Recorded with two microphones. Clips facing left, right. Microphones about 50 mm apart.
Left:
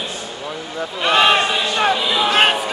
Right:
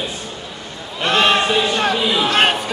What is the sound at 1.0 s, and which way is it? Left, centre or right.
Speech, centre.